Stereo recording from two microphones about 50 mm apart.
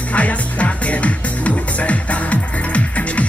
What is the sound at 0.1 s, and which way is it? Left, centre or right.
Music, left.